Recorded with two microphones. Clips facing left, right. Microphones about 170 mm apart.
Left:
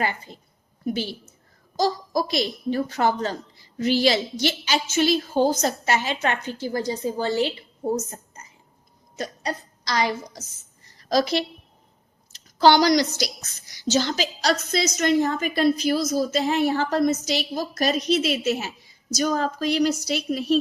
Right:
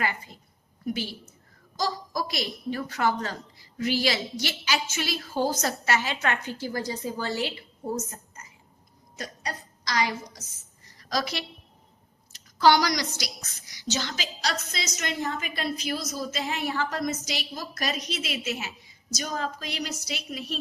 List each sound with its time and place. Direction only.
0.0 s a woman's voice: 30° left (ahead or behind)
9.1 s a woman's voice: 25° left (ahead or behind)